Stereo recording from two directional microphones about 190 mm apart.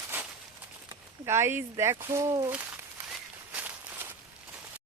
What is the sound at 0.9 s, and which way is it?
Speech, 15° right (ahead or behind).